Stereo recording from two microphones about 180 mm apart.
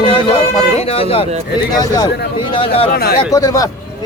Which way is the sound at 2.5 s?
30° left (ahead or behind).